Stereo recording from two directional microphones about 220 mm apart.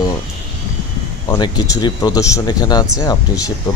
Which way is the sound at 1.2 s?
20° left (ahead or behind).